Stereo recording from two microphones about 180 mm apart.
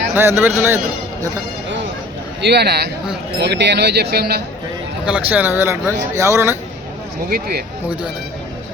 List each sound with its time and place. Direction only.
0.1 s a man's voice: 15° right (ahead or behind)
2.4 s speech: 70° right (ahead or behind)
5.0 s a man's voice: 5° right (ahead or behind)
7.3 s speech: 55° right (ahead or behind)